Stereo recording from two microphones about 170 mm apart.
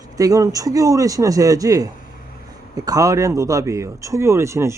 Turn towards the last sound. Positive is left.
turn(degrees=-15)  # may be behind; listen again after turning